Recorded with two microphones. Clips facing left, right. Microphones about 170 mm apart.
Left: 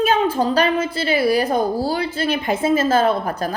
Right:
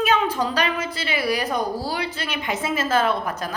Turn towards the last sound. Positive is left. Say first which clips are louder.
# left 4 dB
turn(degrees=30)  # may be behind; listen again after turning